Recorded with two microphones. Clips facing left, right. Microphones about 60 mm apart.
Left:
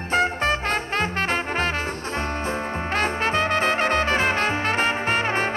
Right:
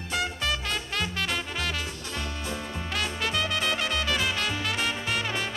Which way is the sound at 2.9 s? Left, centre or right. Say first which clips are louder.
Left 7 dB; left.